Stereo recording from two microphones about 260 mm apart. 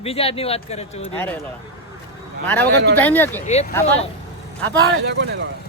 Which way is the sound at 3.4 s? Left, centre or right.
Left.